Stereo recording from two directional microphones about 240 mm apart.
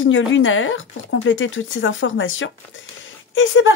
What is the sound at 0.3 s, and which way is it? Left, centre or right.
Speech, left.